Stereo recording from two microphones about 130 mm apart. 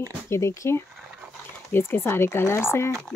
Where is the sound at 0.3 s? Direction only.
20° left (ahead or behind).